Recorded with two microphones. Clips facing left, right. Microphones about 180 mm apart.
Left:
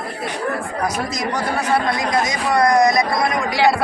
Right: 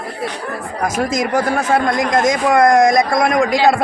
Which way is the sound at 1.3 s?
50° right (ahead or behind).